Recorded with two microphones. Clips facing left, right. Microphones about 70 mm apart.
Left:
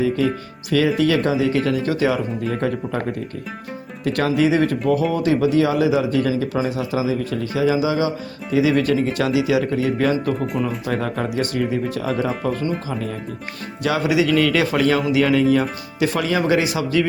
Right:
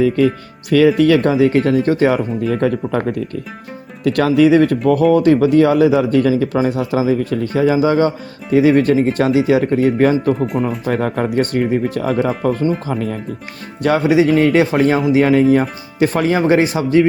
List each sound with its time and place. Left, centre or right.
0.7 s speech: right
2.5 s speech: right
4.0 s speech: right
13.8 s speech: right